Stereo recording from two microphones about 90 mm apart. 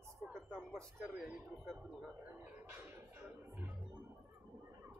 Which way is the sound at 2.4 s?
20° right (ahead or behind).